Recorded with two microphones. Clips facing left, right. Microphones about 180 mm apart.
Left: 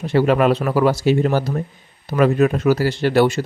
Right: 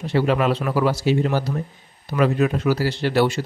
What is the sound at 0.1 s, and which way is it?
Speech, 50° left (ahead or behind).